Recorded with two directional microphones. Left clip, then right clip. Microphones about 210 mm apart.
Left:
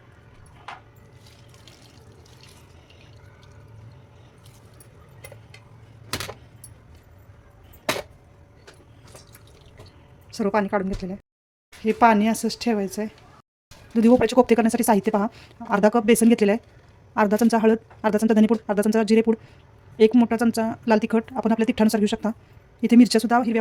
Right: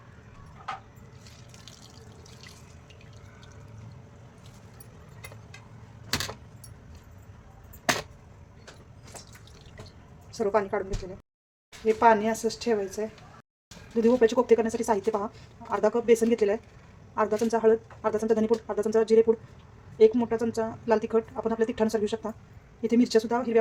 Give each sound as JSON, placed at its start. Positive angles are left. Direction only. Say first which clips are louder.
{"t": 10.3, "sound": "speech", "louder": "left 3 dB", "side_deg": 35}
{"t": 11.9, "sound": "speech", "louder": "left 3 dB", "side_deg": 40}